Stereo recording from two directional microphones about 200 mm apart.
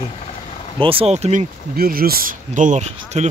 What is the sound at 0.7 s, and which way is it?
Speech, 25° right (ahead or behind).